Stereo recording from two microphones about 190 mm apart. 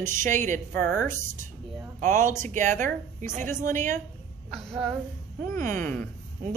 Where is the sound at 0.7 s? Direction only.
10° left (ahead or behind).